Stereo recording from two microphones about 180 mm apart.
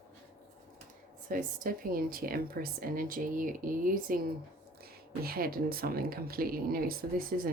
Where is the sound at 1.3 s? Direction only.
50° right (ahead or behind).